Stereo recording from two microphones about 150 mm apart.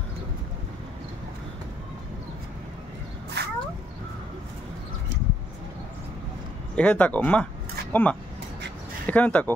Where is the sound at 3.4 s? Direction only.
90° right.